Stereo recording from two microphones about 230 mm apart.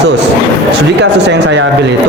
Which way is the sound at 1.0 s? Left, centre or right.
Right.